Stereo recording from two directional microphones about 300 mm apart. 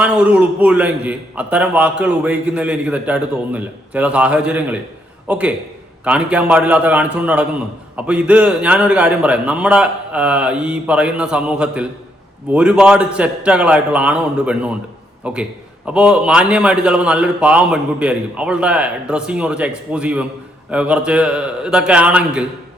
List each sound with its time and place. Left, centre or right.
0.0 s a man's voice: centre